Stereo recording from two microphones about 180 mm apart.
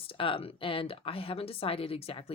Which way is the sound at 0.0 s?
30° left (ahead or behind).